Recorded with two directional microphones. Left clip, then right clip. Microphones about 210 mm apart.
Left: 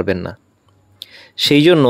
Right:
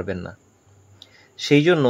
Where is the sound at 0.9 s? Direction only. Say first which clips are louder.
Left 13 dB; 30° left (ahead or behind).